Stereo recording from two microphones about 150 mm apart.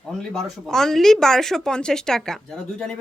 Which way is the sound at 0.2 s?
Centre (ahead or behind).